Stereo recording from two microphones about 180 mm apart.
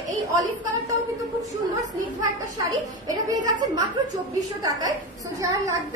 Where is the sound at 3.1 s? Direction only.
25° right (ahead or behind).